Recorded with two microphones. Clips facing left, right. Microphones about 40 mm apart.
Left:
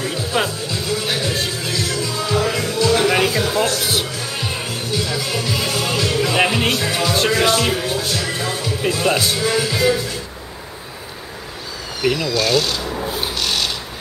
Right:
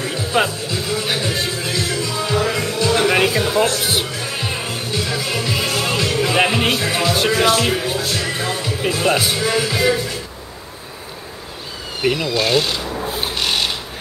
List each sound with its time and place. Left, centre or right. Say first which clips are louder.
0.0 s music: right 2 dB; centre
12.0 s speech: even; centre
12.8 s rub: even; centre
13.2 s rub: right 3 dB; right